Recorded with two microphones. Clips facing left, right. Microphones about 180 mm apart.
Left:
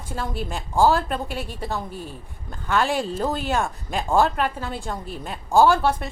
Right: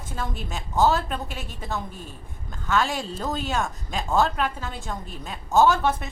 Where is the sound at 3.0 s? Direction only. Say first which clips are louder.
Left 4 dB; 10° left (ahead or behind).